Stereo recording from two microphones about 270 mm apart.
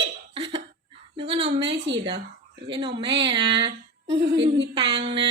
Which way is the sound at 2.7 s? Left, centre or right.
Centre.